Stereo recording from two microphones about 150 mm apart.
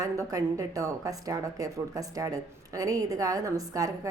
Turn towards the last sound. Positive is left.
turn(degrees=-20)  # may be behind; listen again after turning